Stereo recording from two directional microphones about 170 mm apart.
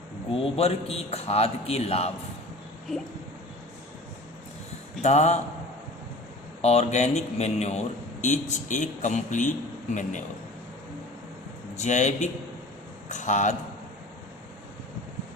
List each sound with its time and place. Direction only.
0.3 s a man's voice: 35° left (ahead or behind)
5.0 s a man's voice: 40° left (ahead or behind)
6.6 s speech: 40° left (ahead or behind)
11.8 s a man's voice: 45° left (ahead or behind)